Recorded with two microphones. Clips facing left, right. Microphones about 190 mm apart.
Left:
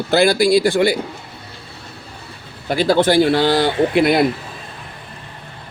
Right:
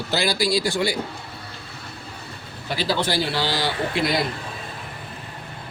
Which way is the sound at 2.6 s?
50° left (ahead or behind).